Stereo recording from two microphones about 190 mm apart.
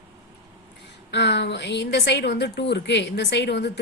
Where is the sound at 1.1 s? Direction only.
65° left (ahead or behind).